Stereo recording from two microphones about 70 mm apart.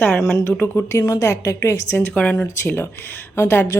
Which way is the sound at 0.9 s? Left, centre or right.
Left.